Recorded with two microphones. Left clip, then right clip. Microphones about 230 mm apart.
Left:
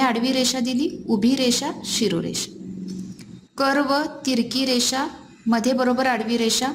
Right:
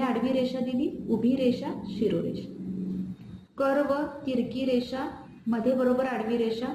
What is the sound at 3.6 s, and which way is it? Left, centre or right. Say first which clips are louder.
A woman's voice: left 5 dB; left.